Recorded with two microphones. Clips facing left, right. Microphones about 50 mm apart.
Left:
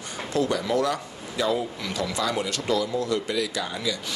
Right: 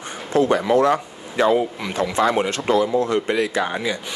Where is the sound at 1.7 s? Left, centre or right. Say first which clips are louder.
Right 7 dB; right.